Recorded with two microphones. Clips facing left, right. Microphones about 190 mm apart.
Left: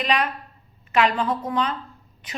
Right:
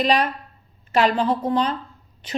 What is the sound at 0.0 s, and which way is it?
A woman's voice, 35° right (ahead or behind).